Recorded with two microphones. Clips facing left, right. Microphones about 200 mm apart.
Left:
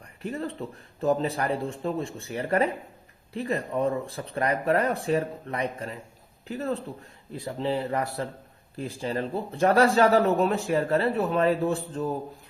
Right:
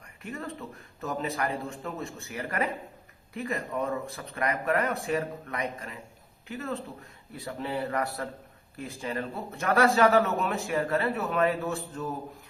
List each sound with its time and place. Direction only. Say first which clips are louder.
0.2 s speech: left 6 dB; 30° left (ahead or behind)